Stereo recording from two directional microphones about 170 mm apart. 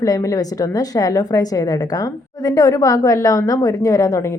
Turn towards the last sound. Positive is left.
turn(degrees=20)  # may be behind; listen again after turning